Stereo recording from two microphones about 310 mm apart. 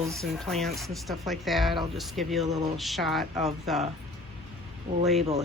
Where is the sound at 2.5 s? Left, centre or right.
Right.